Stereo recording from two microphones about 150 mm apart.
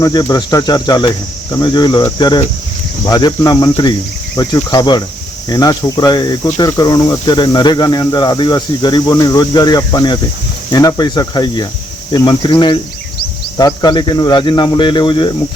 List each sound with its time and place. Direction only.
0.0 s speech: 25° left (ahead or behind)